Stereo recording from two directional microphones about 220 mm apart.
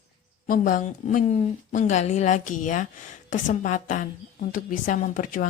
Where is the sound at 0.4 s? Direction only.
40° left (ahead or behind).